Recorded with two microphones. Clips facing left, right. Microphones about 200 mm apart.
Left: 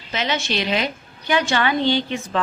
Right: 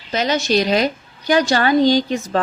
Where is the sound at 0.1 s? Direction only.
40° right (ahead or behind).